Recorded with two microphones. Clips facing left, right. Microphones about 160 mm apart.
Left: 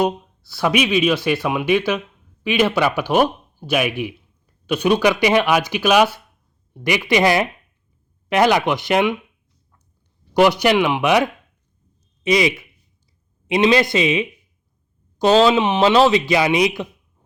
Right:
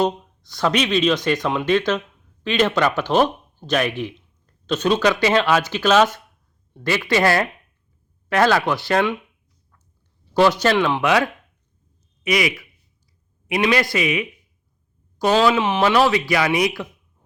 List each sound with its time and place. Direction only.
0.0 s speech: 10° left (ahead or behind)
10.3 s speech: 15° left (ahead or behind)